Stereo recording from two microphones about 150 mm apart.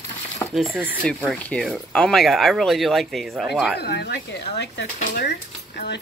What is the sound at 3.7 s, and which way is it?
Speech, 90° left.